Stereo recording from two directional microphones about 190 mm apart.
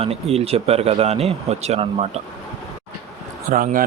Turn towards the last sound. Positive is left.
turn(degrees=-45)  # may be behind; listen again after turning